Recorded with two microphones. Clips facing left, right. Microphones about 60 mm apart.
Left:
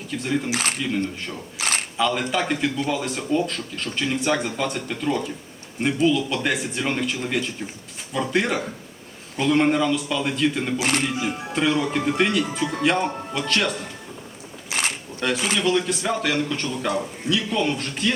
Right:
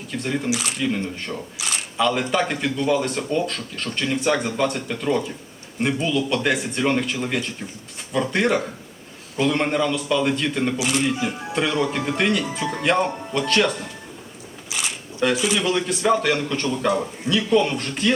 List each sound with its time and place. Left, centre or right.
0.1 s speech: centre
0.5 s a man's voice: left
1.5 s a sound: left
2.0 s speech: centre
10.8 s a man's voice: left
11.2 s speech: centre
14.7 s a sound: left
15.2 s speech: centre